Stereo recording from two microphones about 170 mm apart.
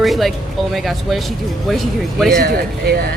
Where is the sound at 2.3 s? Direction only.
65° right (ahead or behind).